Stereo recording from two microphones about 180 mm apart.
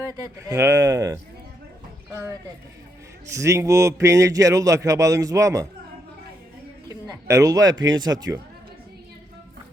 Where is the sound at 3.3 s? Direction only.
15° right (ahead or behind).